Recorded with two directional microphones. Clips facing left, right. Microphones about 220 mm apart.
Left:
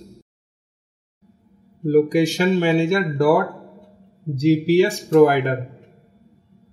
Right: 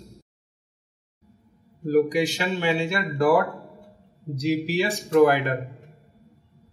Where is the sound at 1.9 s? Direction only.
45° left (ahead or behind).